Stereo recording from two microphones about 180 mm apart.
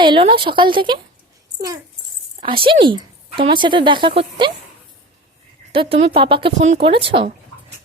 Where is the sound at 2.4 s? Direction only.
30° right (ahead or behind).